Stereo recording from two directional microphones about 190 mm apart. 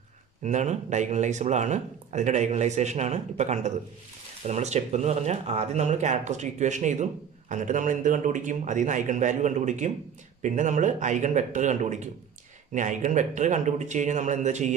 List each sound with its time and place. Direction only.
0.4 s speech: 40° right (ahead or behind)